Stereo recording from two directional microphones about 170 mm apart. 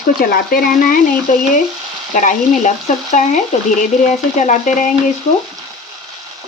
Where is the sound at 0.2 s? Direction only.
60° left (ahead or behind).